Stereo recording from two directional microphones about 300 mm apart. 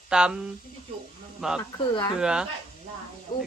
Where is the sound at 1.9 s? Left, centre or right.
Centre.